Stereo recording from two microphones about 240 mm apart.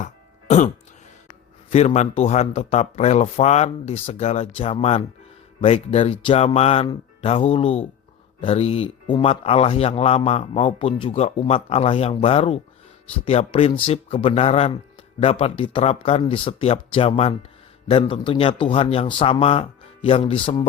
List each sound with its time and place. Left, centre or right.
0.0 s throat clearing: left
1.7 s speech: left